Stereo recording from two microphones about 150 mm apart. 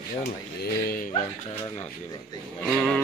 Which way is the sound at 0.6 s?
80° left.